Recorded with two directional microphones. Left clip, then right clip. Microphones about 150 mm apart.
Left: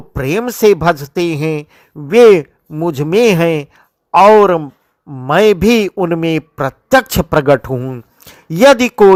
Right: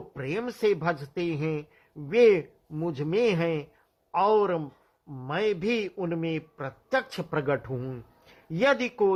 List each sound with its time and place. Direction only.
0.1 s a man's voice: 45° left (ahead or behind)
7.7 s speech: 25° left (ahead or behind)
8.3 s speech: 45° left (ahead or behind)